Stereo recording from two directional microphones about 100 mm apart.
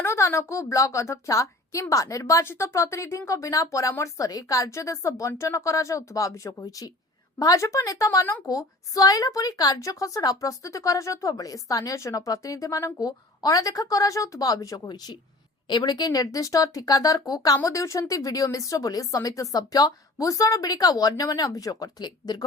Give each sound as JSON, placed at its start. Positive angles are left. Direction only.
{"t": 0.0, "sound": "a woman's voice", "side_deg": 25}